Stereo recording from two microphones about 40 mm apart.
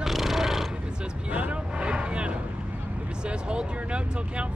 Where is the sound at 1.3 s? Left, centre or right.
Right.